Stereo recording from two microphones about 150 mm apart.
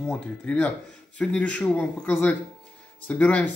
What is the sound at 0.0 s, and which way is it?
A man's voice, 10° left (ahead or behind).